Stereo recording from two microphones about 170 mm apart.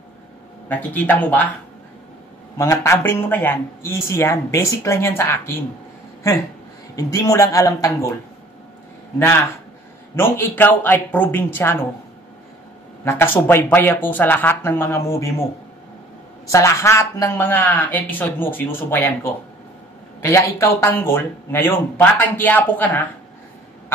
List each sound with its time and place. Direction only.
0.7 s speech: 10° left (ahead or behind)
2.5 s speech: 20° left (ahead or behind)
7.0 s speech: 20° left (ahead or behind)
9.2 s speech: 15° left (ahead or behind)
13.0 s speech: 15° left (ahead or behind)
16.5 s speech: 15° left (ahead or behind)